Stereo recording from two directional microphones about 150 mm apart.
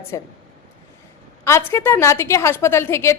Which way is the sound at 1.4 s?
15° left (ahead or behind).